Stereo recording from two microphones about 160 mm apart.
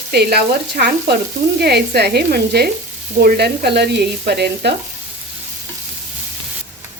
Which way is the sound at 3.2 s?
75° right (ahead or behind).